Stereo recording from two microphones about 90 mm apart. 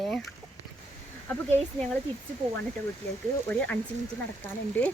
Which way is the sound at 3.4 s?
15° left (ahead or behind).